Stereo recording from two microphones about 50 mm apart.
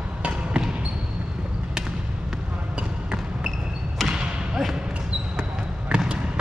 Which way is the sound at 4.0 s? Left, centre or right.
Centre.